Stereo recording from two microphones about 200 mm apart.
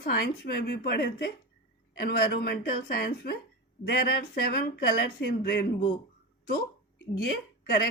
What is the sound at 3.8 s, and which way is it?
Speech, 55° left (ahead or behind).